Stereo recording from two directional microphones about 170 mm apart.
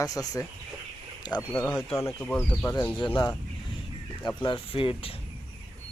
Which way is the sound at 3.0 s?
25° left (ahead or behind).